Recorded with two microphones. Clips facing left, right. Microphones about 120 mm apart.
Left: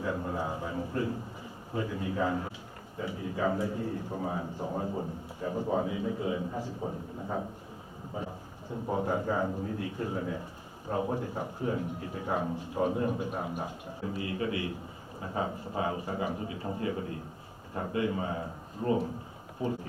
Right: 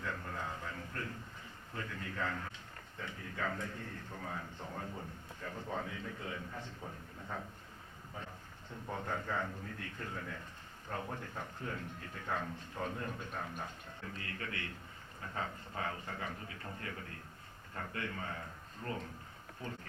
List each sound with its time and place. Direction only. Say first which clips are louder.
0.0 s a sound: left 9 dB; 20° left (ahead or behind)
1.7 s a man's voice: left 11 dB; 15° left (ahead or behind)
6.8 s a man's voice: left 11 dB; 25° left (ahead or behind)
8.7 s a man's voice: left 10 dB; 15° left (ahead or behind)